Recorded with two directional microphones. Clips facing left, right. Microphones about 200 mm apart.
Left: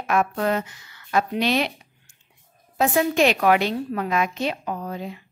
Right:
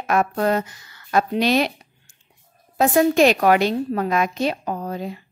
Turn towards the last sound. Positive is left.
turn(degrees=-40)  # may be behind; listen again after turning